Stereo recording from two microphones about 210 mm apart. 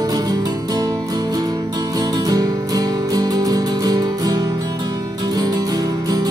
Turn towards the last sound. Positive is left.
turn(degrees=-20)  # may be behind; listen again after turning